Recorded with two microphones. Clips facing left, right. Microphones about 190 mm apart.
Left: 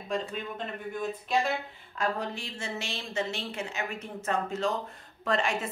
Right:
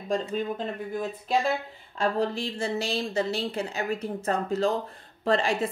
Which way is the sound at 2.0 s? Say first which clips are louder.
Right 6 dB; 30° right (ahead or behind).